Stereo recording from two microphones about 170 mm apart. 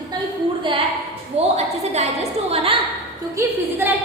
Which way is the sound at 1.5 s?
40° right (ahead or behind).